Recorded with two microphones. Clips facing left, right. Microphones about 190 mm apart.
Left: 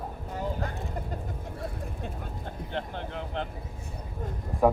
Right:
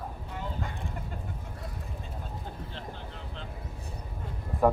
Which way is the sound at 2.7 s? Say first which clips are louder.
Left 7 dB; 65° left (ahead or behind).